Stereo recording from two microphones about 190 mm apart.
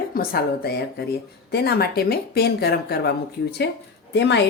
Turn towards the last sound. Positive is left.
turn(degrees=65)  # may be behind; listen again after turning